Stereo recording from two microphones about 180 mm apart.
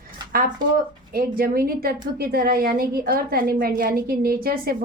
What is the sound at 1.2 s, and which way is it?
A woman's voice, 55° right (ahead or behind).